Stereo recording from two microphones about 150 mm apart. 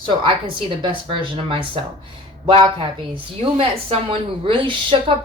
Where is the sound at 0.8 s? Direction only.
35° right (ahead or behind).